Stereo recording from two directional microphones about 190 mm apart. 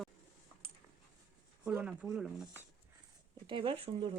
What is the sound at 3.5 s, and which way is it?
Speech, 25° right (ahead or behind).